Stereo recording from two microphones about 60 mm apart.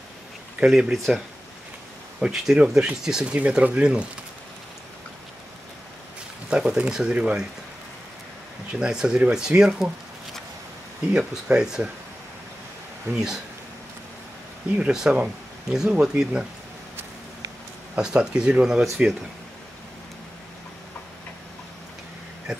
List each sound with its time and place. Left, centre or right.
0.6 s speech: centre
0.9 s speech: centre
3.3 s speech: right
6.5 s speech: centre
8.7 s speech: centre
11.1 s speech: centre
13.1 s speech: centre
14.8 s speech: centre
17.9 s speech: centre